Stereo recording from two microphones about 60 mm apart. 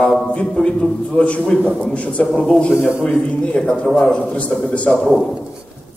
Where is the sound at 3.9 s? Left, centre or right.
Centre.